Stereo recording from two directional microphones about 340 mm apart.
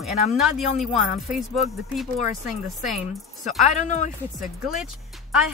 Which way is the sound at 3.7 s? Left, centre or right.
Left.